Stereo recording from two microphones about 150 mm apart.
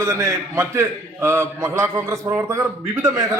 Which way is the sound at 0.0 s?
20° right (ahead or behind).